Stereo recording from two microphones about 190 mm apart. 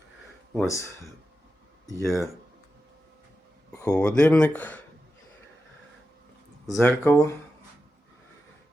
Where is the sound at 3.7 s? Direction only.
15° left (ahead or behind).